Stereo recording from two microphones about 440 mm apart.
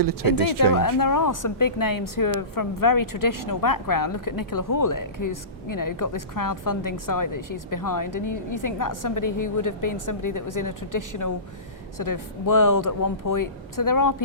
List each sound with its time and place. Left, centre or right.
0.0 s speech: right
0.6 s speech: left